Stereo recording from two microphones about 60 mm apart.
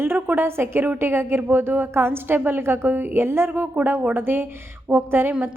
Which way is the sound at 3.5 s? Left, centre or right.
Right.